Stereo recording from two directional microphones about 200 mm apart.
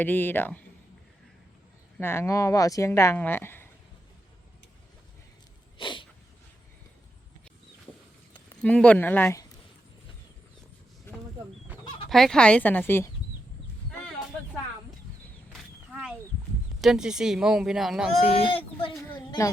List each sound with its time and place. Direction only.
0.0 s speech: 10° left (ahead or behind)
2.0 s speech: 10° left (ahead or behind)
5.7 s a sound: 25° left (ahead or behind)
8.6 s speech: 5° left (ahead or behind)
11.1 s a sound: 10° left (ahead or behind)
12.0 s speech: centre (ahead or behind)
16.8 s speech: 5° right (ahead or behind)
18.3 s speech: 25° left (ahead or behind)